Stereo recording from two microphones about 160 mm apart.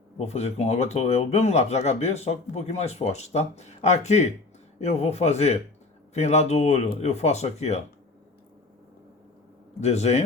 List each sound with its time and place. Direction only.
0.2 s a man's voice: 40° left (ahead or behind)
9.8 s speech: 45° left (ahead or behind)